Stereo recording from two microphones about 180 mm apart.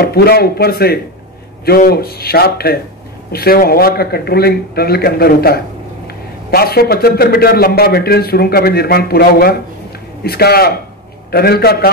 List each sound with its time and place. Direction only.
0.0 s a man's voice: 60° left (ahead or behind)